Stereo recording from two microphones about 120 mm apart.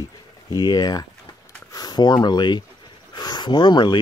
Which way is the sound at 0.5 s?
35° left (ahead or behind).